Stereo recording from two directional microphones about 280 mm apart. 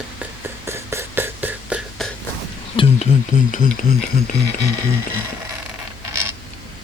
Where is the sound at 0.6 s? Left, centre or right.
Centre.